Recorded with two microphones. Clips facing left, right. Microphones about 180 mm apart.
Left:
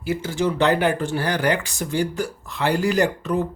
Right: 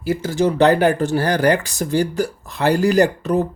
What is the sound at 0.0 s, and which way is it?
Speech, 40° right (ahead or behind).